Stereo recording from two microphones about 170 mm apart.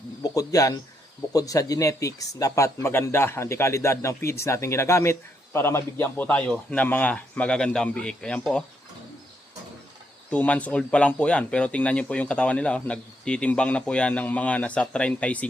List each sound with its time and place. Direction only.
0.2 s speech: 20° left (ahead or behind)
10.3 s speech: 10° left (ahead or behind)